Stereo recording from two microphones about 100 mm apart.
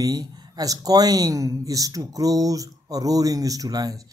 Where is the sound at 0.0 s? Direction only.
40° right (ahead or behind).